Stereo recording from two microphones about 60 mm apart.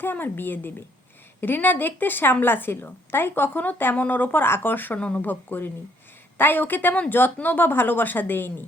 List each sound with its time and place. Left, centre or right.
0.0 s a woman's voice: left
4.9 s a woman's voice: left